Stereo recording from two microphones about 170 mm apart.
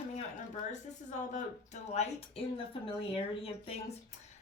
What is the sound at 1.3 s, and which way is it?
A woman's voice, 45° left (ahead or behind).